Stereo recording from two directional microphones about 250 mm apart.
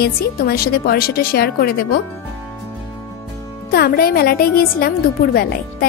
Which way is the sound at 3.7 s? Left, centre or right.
Left.